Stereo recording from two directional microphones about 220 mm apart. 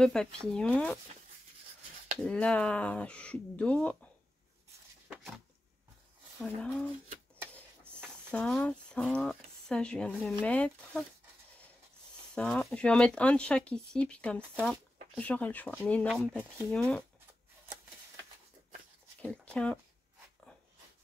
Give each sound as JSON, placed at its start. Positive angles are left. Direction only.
{"t": 0.0, "sound": "speech", "side_deg": 5}
{"t": 2.2, "sound": "speech", "side_deg": 5}
{"t": 6.4, "sound": "speech", "side_deg": 5}
{"t": 8.3, "sound": "speech", "side_deg": 5}
{"t": 12.4, "sound": "speech", "side_deg": 5}
{"t": 19.2, "sound": "speech", "side_deg": 5}